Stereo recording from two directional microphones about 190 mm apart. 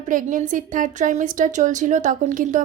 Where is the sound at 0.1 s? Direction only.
45° right (ahead or behind).